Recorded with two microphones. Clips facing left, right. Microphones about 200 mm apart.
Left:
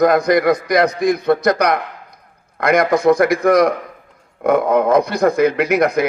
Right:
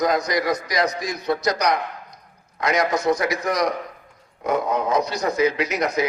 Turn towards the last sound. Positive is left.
turn(degrees=55)  # may be behind; listen again after turning